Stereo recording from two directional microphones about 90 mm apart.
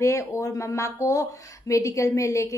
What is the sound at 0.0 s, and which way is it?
A woman's voice, 35° left (ahead or behind).